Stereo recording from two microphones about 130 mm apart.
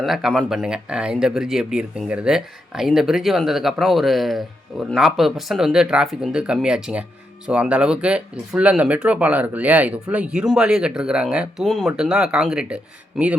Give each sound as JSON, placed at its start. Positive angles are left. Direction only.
{"t": 0.0, "sound": "speech", "side_deg": 0}